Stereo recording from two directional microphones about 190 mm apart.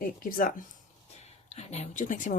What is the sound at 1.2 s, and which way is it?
Speech, 35° left (ahead or behind).